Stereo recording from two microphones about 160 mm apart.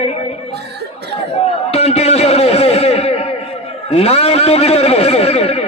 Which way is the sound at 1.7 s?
40° left (ahead or behind).